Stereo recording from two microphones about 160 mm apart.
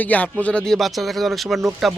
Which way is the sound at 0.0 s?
10° left (ahead or behind).